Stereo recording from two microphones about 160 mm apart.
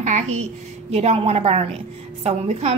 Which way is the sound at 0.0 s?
45° right (ahead or behind).